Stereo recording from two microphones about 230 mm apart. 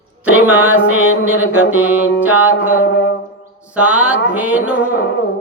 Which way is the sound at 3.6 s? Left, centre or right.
Centre.